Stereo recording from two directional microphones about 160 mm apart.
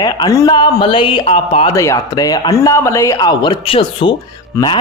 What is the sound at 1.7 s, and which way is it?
Speech, 20° left (ahead or behind).